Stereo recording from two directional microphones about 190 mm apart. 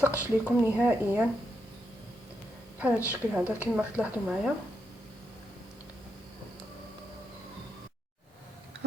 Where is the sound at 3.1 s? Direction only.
5° right (ahead or behind).